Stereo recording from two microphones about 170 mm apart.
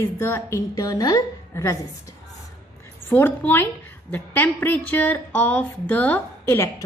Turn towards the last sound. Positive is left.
turn(degrees=15)  # may be behind; listen again after turning